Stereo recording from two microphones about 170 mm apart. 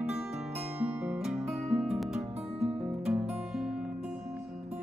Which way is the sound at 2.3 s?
35° right (ahead or behind).